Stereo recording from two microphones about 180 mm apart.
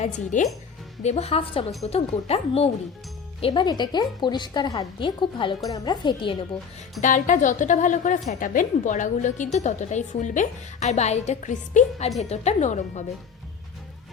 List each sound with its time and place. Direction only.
0.0 s a woman's voice: 45° left (ahead or behind); by 6.3 s 25° left (ahead or behind)
7.0 s a woman's voice: 45° left (ahead or behind)